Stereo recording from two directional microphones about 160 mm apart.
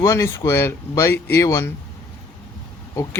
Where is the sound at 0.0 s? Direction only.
20° left (ahead or behind).